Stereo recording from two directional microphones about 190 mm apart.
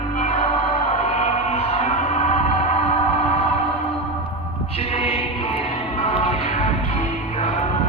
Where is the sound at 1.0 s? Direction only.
35° left (ahead or behind).